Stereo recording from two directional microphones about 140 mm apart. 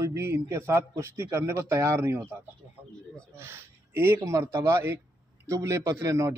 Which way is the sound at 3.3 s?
15° right (ahead or behind).